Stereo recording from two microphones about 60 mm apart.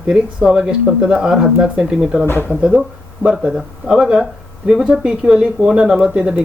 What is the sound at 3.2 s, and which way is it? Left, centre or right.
Speech, centre.